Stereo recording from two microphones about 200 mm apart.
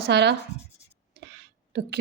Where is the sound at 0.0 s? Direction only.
60° right (ahead or behind).